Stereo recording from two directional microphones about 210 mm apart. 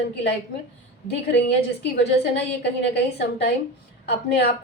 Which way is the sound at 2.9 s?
50° left (ahead or behind).